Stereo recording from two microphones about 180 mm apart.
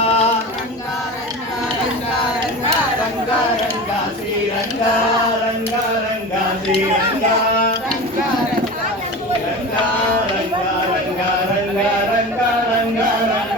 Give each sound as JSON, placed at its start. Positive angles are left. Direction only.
{"t": 0.0, "sound": "music", "side_deg": 35}